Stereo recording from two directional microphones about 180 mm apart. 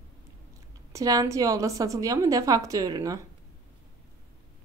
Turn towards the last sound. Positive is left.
turn(degrees=-20)  # may be behind; listen again after turning